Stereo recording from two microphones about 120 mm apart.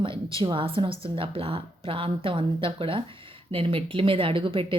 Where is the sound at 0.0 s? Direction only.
45° right (ahead or behind).